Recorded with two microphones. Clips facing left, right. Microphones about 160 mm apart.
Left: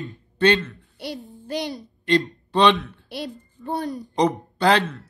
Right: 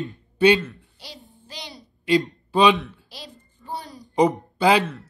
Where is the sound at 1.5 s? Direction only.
50° left (ahead or behind).